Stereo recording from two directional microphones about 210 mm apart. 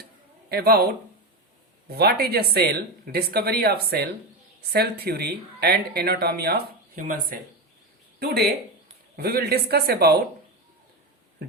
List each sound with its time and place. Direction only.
0.5 s speech: 50° right (ahead or behind)